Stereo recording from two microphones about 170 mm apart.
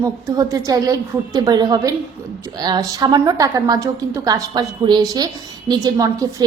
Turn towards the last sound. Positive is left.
turn(degrees=-25)  # may be behind; listen again after turning